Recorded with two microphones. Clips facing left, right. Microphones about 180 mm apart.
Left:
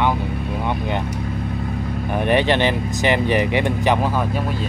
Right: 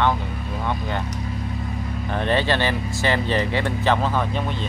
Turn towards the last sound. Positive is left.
turn(degrees=5)  # may be behind; listen again after turning